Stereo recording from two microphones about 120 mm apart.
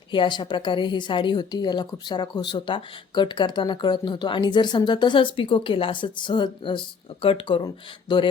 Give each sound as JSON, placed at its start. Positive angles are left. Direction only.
{"t": 0.1, "sound": "a woman's voice", "side_deg": 40}